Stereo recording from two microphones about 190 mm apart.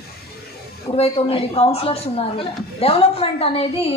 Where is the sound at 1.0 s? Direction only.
30° left (ahead or behind).